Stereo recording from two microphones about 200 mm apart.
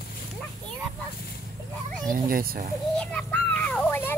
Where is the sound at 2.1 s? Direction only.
45° right (ahead or behind).